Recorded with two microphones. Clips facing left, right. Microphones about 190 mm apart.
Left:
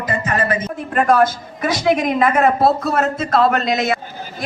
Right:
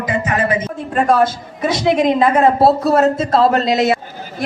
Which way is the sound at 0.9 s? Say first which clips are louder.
Even; 30° right (ahead or behind).